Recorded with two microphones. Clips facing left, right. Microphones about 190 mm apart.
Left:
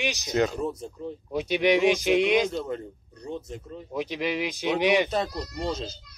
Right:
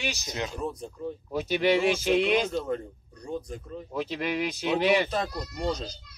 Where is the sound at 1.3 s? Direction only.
15° left (ahead or behind).